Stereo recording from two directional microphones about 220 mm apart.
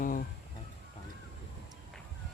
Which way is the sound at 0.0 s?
40° left (ahead or behind).